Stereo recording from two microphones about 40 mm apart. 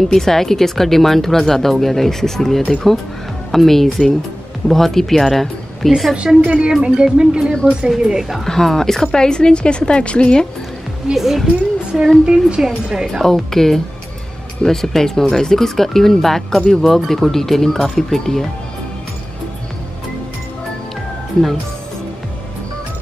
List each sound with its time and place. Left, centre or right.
0.1 s speech: centre
6.1 s speech: right
8.5 s a woman's voice: centre
11.1 s speech: centre
12.3 s speech: right
13.2 s speech: centre